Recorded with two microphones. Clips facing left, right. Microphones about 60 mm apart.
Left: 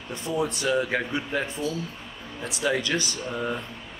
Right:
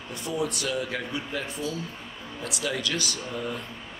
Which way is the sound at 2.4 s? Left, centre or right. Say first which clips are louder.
Left 4 dB; left.